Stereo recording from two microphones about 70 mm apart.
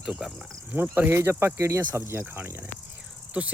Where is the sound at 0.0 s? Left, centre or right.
Centre.